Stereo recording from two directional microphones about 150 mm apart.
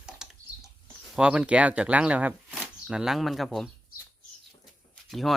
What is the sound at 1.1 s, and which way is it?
Speech, 5° right (ahead or behind).